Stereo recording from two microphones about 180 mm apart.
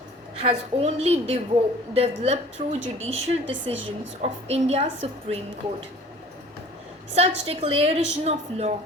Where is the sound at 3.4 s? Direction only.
90° right.